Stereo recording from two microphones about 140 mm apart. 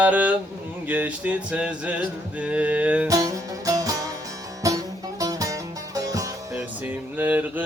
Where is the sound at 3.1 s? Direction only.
25° right (ahead or behind).